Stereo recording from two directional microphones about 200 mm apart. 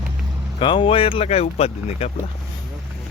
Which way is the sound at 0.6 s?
25° left (ahead or behind).